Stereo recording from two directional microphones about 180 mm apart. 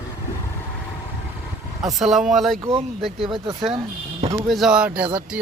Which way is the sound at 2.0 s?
5° right (ahead or behind).